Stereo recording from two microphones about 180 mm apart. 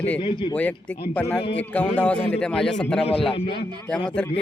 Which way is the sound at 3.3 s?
30° left (ahead or behind).